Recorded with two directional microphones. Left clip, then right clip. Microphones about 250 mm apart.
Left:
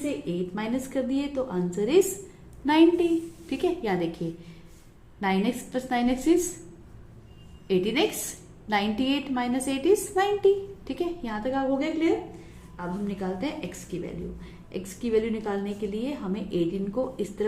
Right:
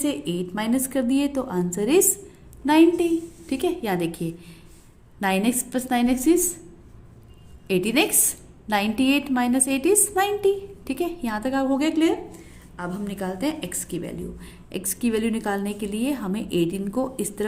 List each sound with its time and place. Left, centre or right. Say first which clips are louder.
0.5 s a woman's voice: right 7 dB; right
7.7 s a woman's voice: right 3 dB; right